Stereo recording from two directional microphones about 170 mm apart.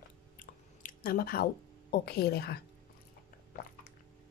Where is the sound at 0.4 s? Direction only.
55° left (ahead or behind); by 2.6 s 70° left (ahead or behind).